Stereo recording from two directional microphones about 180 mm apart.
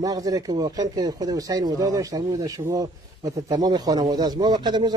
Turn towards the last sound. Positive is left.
turn(degrees=-25)  # may be behind; listen again after turning